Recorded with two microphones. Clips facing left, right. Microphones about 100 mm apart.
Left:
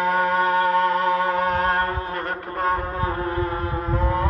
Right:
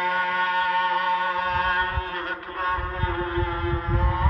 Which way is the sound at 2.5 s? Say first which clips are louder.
Left 4 dB; 35° left (ahead or behind).